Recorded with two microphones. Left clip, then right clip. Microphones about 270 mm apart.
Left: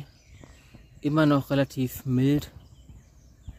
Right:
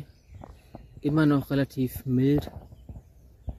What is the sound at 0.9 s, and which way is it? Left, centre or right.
Speech, centre.